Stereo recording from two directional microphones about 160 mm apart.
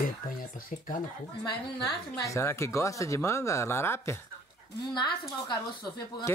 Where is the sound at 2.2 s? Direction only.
20° left (ahead or behind).